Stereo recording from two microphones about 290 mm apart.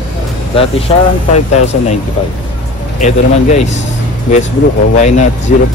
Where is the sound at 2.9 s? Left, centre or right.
Left.